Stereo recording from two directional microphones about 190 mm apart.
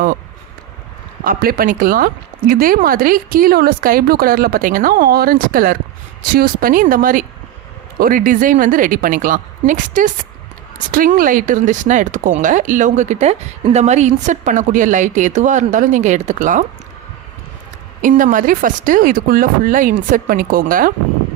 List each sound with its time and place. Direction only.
1.2 s a woman's voice: 50° right (ahead or behind)
18.0 s a woman's voice: 45° right (ahead or behind)